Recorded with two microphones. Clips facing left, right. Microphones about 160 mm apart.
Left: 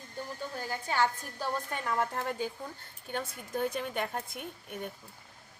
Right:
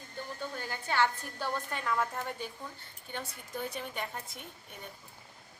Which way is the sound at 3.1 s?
50° left (ahead or behind).